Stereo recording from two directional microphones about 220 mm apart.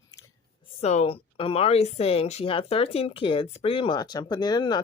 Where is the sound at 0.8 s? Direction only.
30° left (ahead or behind).